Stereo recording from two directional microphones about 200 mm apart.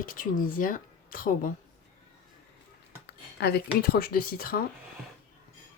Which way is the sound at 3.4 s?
55° left (ahead or behind).